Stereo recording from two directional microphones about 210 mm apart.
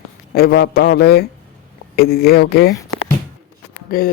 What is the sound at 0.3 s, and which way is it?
Speech, 50° left (ahead or behind).